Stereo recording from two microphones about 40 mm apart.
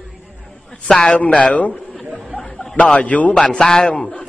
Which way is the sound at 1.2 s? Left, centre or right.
Left.